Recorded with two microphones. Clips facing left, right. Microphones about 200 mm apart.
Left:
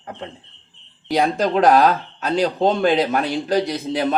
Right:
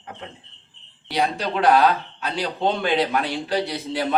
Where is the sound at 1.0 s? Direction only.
45° left (ahead or behind).